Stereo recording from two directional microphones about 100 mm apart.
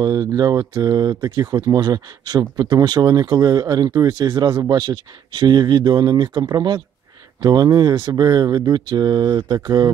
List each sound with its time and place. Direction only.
0.0 s speech: 40° right (ahead or behind)